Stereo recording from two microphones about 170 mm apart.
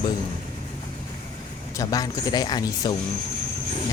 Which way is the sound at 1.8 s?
20° left (ahead or behind).